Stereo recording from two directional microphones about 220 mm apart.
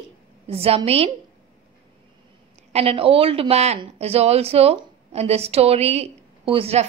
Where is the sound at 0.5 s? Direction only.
25° right (ahead or behind).